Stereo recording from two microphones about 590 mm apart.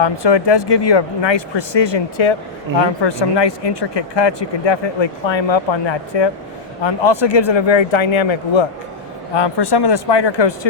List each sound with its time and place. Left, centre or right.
0.0 s speech: left